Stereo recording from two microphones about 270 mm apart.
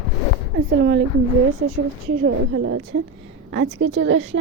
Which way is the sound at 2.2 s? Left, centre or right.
Right.